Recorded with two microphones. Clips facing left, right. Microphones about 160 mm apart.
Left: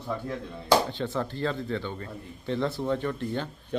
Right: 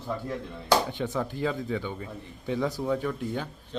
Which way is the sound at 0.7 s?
15° right (ahead or behind).